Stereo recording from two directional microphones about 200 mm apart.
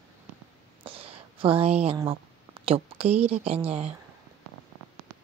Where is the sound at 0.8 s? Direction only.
30° right (ahead or behind).